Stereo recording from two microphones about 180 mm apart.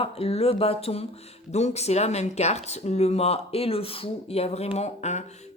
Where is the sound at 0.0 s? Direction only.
30° left (ahead or behind).